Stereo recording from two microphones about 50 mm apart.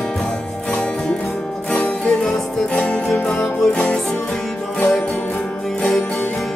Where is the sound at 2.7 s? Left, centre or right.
Left.